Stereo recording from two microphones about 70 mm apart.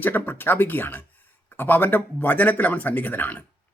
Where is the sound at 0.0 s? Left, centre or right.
Left.